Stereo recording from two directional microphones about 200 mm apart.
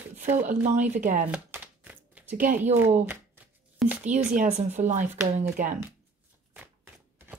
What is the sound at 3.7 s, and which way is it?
Speech, 5° right (ahead or behind).